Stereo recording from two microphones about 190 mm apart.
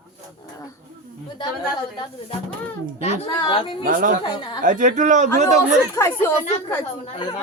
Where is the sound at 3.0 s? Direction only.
30° left (ahead or behind).